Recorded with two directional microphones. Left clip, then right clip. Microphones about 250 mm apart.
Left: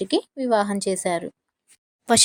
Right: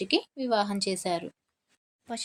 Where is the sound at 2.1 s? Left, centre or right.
Left.